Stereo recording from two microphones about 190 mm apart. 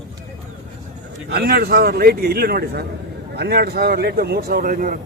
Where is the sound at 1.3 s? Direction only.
55° right (ahead or behind).